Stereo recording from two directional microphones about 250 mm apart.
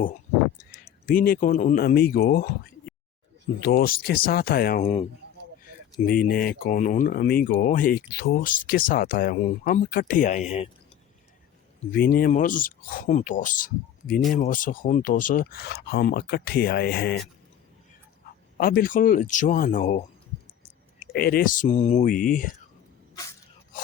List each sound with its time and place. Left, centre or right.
1.0 s speech: left
4.8 s speech: left
6.1 s speech: left
11.9 s speech: left
18.5 s speech: left
21.2 s speech: left